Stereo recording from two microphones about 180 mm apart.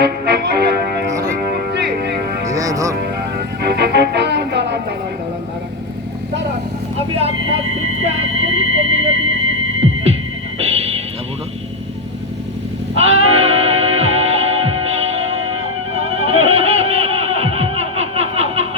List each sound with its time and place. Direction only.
0.0 s music: 65° right (ahead or behind)
2.5 s music: 20° right (ahead or behind)
2.9 s music: 60° right (ahead or behind)
6.9 s vehicle: 35° right (ahead or behind)
8.2 s vehicle: 90° right
8.5 s music: 90° right
10.6 s vehicle: 35° right (ahead or behind)
13.0 s music: 35° right (ahead or behind)